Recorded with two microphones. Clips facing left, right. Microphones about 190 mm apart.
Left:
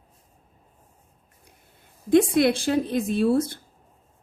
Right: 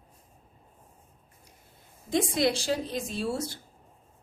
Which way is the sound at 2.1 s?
60° left (ahead or behind).